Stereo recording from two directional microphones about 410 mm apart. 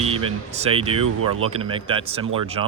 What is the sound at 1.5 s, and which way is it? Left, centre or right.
Speech, centre.